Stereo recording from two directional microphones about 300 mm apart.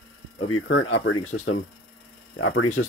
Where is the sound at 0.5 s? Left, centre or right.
Left.